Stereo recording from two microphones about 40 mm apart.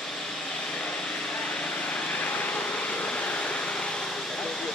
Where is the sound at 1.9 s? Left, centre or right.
Left.